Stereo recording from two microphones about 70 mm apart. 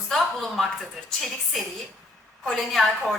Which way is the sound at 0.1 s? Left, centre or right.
Centre.